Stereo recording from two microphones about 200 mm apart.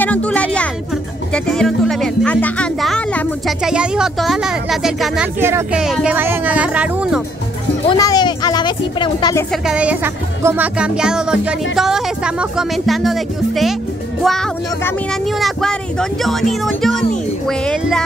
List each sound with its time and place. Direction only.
0.0 s music: 5° left (ahead or behind)
1.3 s speech: 5° left (ahead or behind)
7.9 s speech: 20° left (ahead or behind)
9.5 s speech: 5° right (ahead or behind)